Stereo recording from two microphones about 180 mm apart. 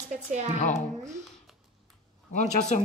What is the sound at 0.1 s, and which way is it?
Speech, 40° right (ahead or behind).